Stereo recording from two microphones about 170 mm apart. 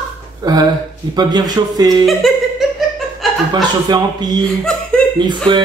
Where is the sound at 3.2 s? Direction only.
Centre (ahead or behind).